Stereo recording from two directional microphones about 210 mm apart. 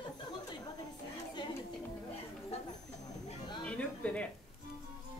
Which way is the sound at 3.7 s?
5° left (ahead or behind).